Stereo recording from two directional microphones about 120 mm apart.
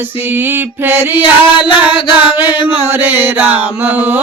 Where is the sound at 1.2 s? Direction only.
45° left (ahead or behind).